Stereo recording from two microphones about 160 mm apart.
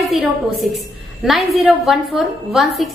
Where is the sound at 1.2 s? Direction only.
Centre (ahead or behind).